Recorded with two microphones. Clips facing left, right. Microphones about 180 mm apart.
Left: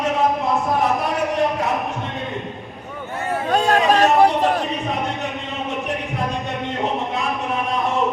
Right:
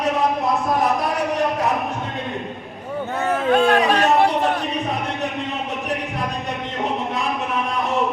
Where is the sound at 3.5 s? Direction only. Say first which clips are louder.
Even; 40° left (ahead or behind).